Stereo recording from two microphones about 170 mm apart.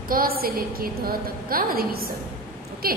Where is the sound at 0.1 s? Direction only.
60° right (ahead or behind).